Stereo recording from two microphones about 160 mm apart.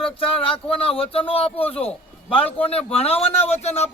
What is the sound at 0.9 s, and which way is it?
A man's voice, 35° left (ahead or behind).